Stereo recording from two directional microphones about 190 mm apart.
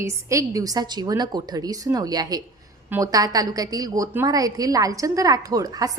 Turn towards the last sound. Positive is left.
turn(degrees=-20)  # may be behind; listen again after turning